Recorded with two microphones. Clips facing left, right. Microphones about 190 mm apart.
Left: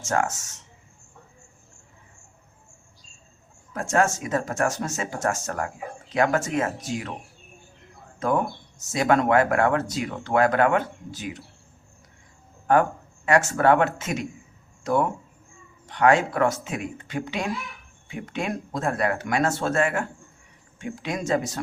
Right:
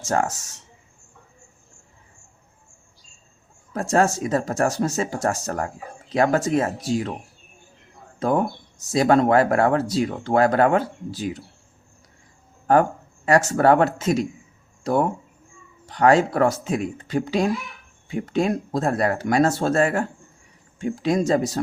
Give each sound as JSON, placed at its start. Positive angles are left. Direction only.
{"t": 0.0, "sound": "speech", "side_deg": -35}
{"t": 3.7, "sound": "speech", "side_deg": -35}
{"t": 8.2, "sound": "speech", "side_deg": -35}
{"t": 12.7, "sound": "speech", "side_deg": -35}